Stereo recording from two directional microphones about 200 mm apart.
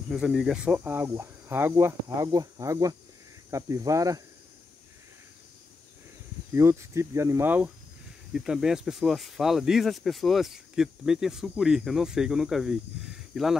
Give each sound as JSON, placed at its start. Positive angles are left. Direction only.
{"t": 0.1, "sound": "speech", "side_deg": 0}
{"t": 6.5, "sound": "speech", "side_deg": -15}